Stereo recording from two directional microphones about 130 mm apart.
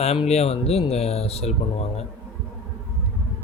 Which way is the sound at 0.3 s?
50° left (ahead or behind).